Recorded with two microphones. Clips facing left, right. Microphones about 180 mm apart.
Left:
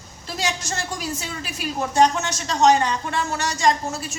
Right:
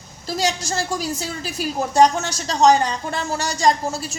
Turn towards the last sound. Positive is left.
turn(degrees=-35)  # may be behind; listen again after turning